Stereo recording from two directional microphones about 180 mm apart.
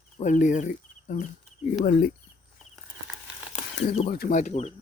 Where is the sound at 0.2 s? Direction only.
45° left (ahead or behind).